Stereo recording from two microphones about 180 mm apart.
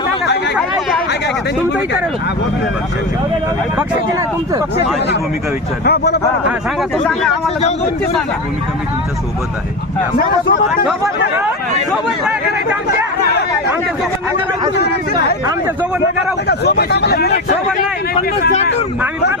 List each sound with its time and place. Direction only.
5.8 s speech: 65° left (ahead or behind)
7.0 s speech: 5° left (ahead or behind)
11.9 s speech: 5° right (ahead or behind)
13.1 s speech: 65° left (ahead or behind)
14.8 s speech: 60° left (ahead or behind)
15.4 s speech: 20° right (ahead or behind)
16.5 s speech: 65° left (ahead or behind)